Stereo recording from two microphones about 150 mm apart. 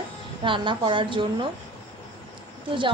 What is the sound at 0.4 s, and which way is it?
A woman's voice, 35° right (ahead or behind).